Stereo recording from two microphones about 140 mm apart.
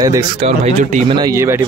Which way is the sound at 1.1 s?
25° right (ahead or behind).